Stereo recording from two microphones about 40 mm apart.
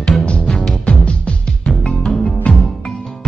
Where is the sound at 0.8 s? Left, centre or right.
Left.